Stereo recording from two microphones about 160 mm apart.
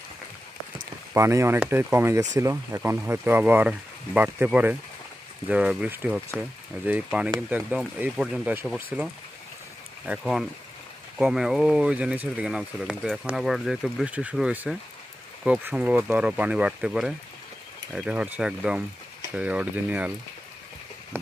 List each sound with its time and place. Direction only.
1.1 s speech: 20° right (ahead or behind)
10.1 s speech: 5° right (ahead or behind)